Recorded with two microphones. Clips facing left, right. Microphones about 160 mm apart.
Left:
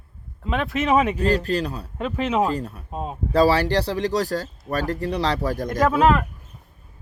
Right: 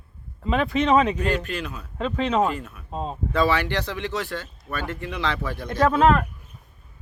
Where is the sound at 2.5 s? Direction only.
35° left (ahead or behind).